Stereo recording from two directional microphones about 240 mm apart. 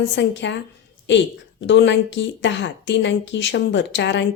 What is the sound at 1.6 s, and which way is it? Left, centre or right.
Speech, left.